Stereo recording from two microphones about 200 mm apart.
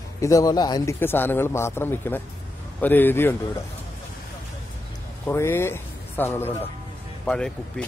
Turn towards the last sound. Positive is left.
turn(degrees=5)  # may be behind; listen again after turning